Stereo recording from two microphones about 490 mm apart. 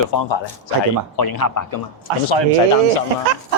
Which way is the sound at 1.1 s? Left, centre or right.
Left.